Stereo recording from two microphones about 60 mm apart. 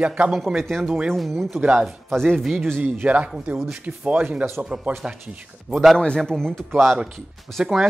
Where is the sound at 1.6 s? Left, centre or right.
Centre.